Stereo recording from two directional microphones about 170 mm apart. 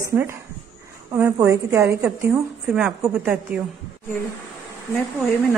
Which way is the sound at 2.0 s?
5° right (ahead or behind).